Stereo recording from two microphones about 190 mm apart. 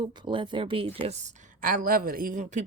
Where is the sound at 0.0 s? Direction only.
25° right (ahead or behind).